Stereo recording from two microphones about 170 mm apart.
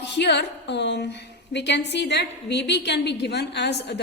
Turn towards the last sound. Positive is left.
turn(degrees=85)